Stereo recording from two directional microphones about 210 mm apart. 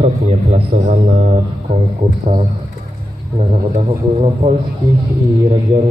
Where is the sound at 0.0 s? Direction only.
30° right (ahead or behind).